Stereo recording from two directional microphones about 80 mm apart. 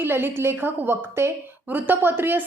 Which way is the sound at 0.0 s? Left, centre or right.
Right.